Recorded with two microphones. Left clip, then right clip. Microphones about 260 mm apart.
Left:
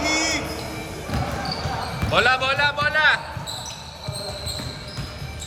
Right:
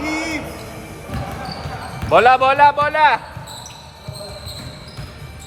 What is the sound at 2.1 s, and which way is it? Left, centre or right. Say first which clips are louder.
Speech: right 7 dB; right.